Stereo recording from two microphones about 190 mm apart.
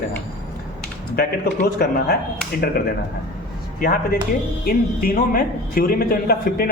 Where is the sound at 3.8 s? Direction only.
50° left (ahead or behind).